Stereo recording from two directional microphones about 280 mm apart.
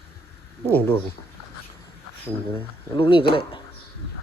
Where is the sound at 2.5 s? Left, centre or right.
Centre.